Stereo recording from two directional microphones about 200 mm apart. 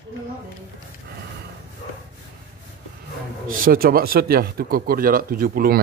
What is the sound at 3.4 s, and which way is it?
Speech, 45° right (ahead or behind).